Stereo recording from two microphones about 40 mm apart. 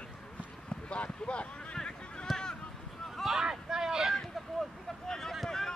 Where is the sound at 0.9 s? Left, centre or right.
Left.